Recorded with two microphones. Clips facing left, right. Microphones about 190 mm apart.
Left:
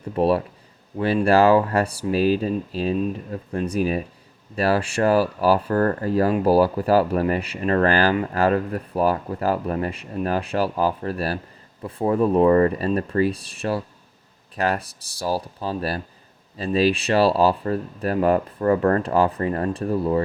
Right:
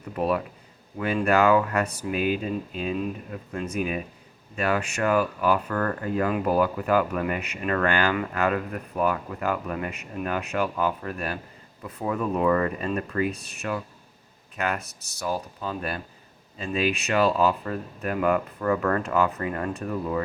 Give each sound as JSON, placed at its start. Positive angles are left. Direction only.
{"t": 0.2, "sound": "speech", "side_deg": 30}